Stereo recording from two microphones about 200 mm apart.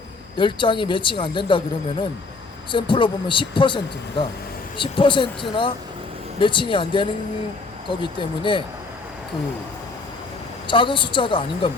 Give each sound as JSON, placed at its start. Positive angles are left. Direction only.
{"t": 0.3, "sound": "speech", "side_deg": 25}
{"t": 10.7, "sound": "speech", "side_deg": 25}